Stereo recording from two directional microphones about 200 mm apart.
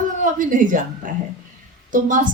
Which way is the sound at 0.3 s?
40° right (ahead or behind).